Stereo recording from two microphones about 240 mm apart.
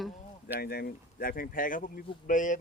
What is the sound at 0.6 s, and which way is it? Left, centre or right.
Speech, left.